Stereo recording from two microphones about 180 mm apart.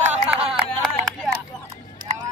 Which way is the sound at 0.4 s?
30° right (ahead or behind).